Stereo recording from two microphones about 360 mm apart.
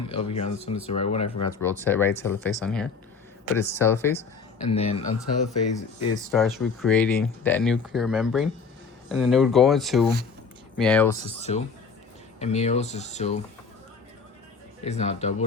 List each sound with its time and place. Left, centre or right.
0.1 s speech: centre
1.6 s speech: centre
6.1 s speech: centre
11.3 s speech: centre
14.8 s speech: centre